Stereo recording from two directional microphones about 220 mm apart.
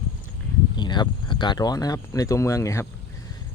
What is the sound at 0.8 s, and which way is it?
Speech, 20° left (ahead or behind).